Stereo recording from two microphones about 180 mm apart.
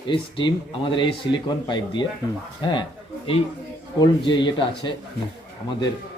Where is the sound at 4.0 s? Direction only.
25° left (ahead or behind).